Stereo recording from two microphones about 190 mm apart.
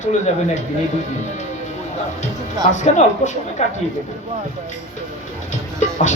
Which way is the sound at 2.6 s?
40° left (ahead or behind).